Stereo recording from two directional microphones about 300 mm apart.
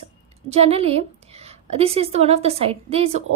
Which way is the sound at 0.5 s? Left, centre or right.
Centre.